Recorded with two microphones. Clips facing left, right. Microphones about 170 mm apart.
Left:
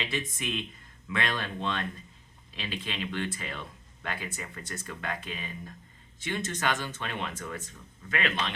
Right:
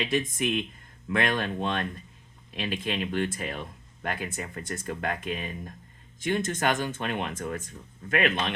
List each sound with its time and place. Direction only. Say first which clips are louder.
0.0 s speech: right 7 dB; 45° right (ahead or behind)